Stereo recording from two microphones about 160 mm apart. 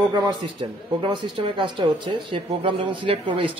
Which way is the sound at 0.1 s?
25° right (ahead or behind).